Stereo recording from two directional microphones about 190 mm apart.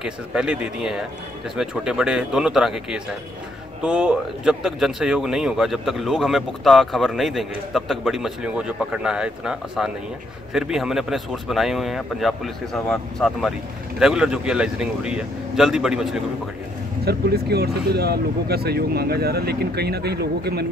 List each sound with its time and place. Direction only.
0.0 s speech: 5° right (ahead or behind)
17.0 s speech: 55° right (ahead or behind)